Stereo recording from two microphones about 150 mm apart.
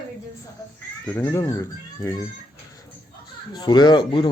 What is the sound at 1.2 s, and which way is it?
Speech, 20° left (ahead or behind).